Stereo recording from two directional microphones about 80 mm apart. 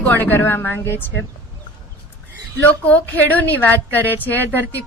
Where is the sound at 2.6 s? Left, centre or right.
Left.